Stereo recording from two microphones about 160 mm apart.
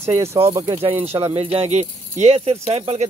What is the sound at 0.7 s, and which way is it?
Speech, 40° right (ahead or behind).